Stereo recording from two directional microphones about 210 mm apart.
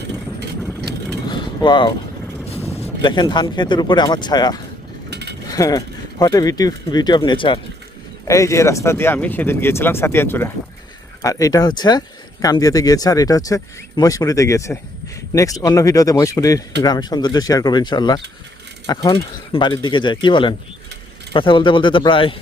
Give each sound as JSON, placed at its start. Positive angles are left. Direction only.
{"t": 1.3, "sound": "a sound", "side_deg": 20}
{"t": 2.8, "sound": "speech", "side_deg": 20}
{"t": 5.1, "sound": "mechanisms", "side_deg": -55}
{"t": 5.5, "sound": "speech", "side_deg": 15}